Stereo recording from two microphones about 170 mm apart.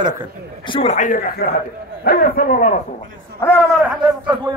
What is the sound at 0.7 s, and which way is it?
Speech, 30° left (ahead or behind).